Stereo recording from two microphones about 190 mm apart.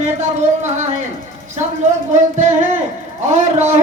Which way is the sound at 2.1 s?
40° right (ahead or behind).